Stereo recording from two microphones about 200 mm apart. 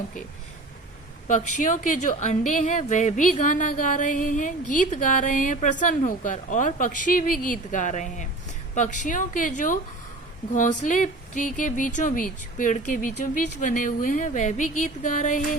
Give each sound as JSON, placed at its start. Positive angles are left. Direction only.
{"t": 1.3, "sound": "a woman's voice", "side_deg": 40}